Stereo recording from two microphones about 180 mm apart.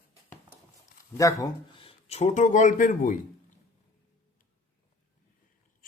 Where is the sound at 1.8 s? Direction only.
35° left (ahead or behind).